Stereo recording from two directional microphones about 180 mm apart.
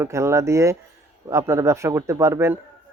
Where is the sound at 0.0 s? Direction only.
15° right (ahead or behind).